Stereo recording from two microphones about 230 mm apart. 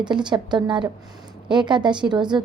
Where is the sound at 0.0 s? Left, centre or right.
Centre.